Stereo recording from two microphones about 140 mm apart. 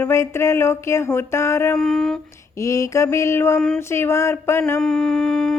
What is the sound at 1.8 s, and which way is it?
Humming, 5° left (ahead or behind).